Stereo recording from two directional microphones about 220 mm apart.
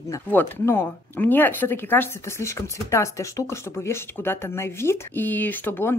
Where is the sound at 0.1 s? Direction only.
10° left (ahead or behind).